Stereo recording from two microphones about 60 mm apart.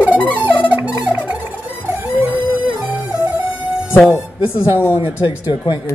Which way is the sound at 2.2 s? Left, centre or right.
Right.